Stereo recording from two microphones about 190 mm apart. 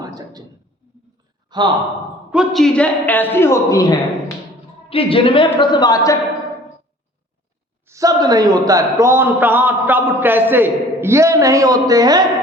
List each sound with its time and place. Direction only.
0.0 s a sound: 20° right (ahead or behind)
1.5 s a man's voice: 25° right (ahead or behind)
2.3 s a man's voice: centre (ahead or behind); by 3.9 s 15° left (ahead or behind)
4.9 s speech: 30° left (ahead or behind)
7.9 s a man's voice: 15° right (ahead or behind)